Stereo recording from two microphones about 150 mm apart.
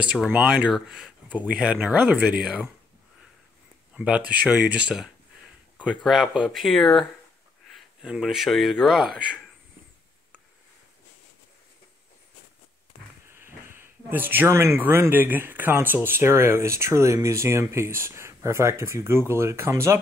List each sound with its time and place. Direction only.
0.0 s speech: 5° right (ahead or behind)
3.9 s speech: 5° right (ahead or behind)
13.3 s speech: 15° right (ahead or behind)